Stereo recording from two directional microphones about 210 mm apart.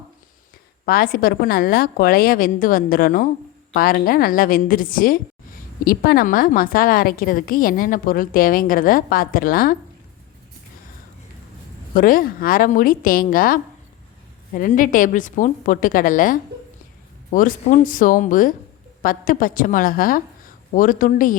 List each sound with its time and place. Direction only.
0.9 s a woman's voice: 45° left (ahead or behind)
11.9 s a woman's voice: 40° left (ahead or behind)